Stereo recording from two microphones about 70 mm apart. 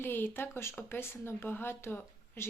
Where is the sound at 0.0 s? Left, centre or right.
Left.